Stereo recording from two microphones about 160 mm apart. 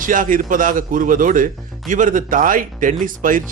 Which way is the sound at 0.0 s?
55° right (ahead or behind).